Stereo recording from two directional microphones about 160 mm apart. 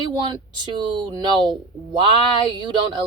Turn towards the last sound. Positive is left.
turn(degrees=-30)  # may be behind; listen again after turning